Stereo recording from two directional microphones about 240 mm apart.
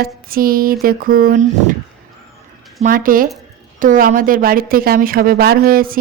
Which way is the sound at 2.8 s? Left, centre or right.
Right.